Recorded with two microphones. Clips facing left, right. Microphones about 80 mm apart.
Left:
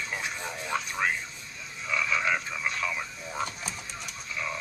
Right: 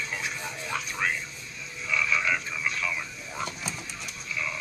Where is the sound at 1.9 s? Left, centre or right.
Left.